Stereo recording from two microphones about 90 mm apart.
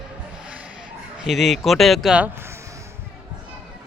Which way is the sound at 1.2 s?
Centre (ahead or behind).